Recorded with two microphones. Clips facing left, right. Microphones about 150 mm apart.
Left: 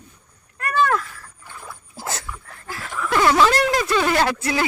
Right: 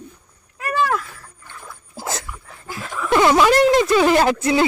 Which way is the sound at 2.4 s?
15° right (ahead or behind).